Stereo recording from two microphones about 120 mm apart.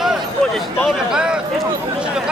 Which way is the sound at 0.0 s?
5° right (ahead or behind).